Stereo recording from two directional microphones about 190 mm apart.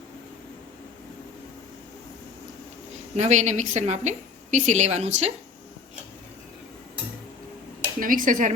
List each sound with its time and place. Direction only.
3.2 s a woman's voice: 40° right (ahead or behind)
7.9 s speech: 45° right (ahead or behind)